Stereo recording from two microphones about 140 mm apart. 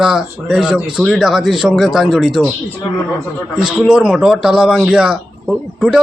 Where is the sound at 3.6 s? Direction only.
5° right (ahead or behind).